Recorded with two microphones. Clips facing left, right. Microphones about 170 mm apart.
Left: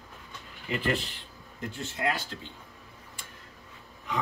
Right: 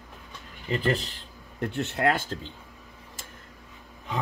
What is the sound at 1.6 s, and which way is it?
Speech, 65° right (ahead or behind).